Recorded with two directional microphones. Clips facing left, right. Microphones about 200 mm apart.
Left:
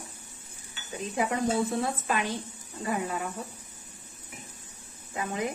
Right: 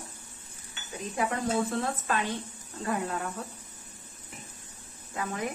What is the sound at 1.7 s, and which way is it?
Speech, 15° left (ahead or behind).